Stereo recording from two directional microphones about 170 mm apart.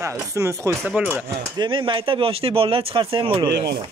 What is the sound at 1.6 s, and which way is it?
Speech, 30° right (ahead or behind).